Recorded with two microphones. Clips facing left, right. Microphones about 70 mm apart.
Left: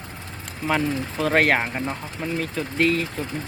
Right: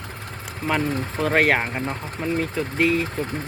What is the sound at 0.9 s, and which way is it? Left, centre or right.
Speech, right.